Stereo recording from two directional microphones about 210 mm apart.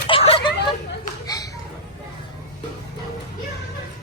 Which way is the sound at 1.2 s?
15° left (ahead or behind).